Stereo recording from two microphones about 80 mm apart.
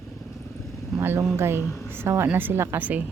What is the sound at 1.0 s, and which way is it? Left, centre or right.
A woman's voice, right.